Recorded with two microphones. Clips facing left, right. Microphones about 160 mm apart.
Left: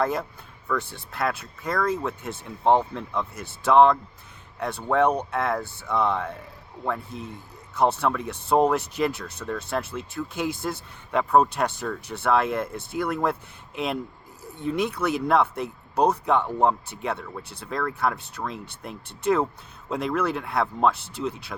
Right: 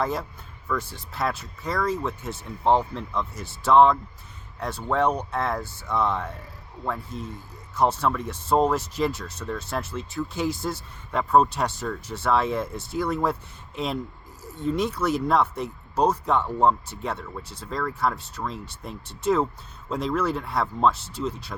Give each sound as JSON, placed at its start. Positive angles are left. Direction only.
{"t": 0.7, "sound": "speech", "side_deg": 65}
{"t": 7.8, "sound": "speech", "side_deg": 60}
{"t": 14.4, "sound": "a sound", "side_deg": 60}
{"t": 14.8, "sound": "speech", "side_deg": 60}